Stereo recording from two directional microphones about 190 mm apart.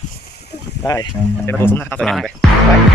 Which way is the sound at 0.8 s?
20° left (ahead or behind).